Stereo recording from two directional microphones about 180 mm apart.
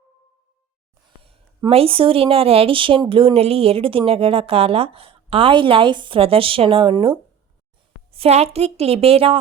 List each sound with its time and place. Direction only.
1.2 s speech: 30° right (ahead or behind)